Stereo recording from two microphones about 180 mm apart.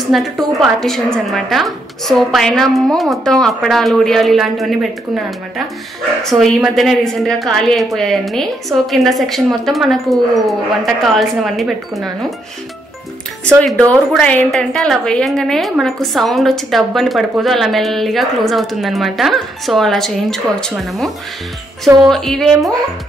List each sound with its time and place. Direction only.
0.1 s a woman's voice: centre (ahead or behind)
6.2 s a woman's voice: centre (ahead or behind)
13.6 s a woman's voice: 5° left (ahead or behind)
21.8 s a woman's voice: 20° right (ahead or behind)
22.1 s a woman's voice: centre (ahead or behind)